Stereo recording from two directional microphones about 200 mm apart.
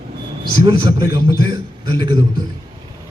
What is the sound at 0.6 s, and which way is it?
A man's voice, 20° right (ahead or behind).